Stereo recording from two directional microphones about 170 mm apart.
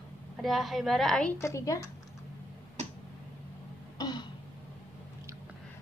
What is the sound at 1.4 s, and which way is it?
Speech, 20° left (ahead or behind).